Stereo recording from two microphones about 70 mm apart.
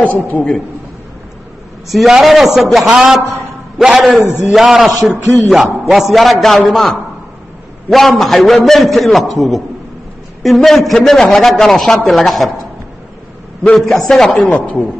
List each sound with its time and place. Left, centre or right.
0.1 s a man's voice: left
1.9 s a man's voice: centre
13.7 s a man's voice: centre
14.4 s a woman's voice: centre